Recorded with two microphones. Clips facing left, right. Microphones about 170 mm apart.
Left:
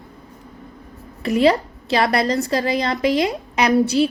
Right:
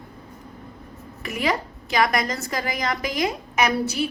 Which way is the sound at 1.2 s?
30° left (ahead or behind).